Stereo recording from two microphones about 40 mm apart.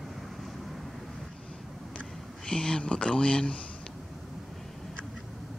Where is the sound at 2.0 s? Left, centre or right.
Centre.